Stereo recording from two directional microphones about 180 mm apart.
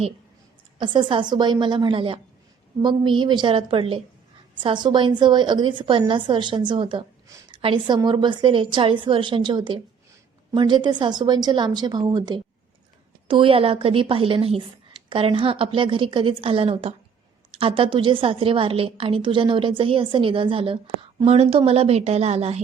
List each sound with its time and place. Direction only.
0.8 s a woman's voice: 25° right (ahead or behind)